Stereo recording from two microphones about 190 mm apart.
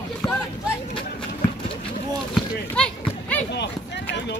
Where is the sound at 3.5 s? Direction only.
65° left (ahead or behind).